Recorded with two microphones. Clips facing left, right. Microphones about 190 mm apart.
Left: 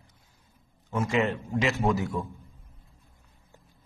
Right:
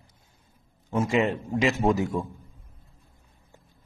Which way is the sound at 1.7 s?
40° right (ahead or behind).